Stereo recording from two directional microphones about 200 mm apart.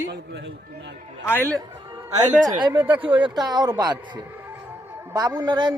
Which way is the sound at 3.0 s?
25° right (ahead or behind).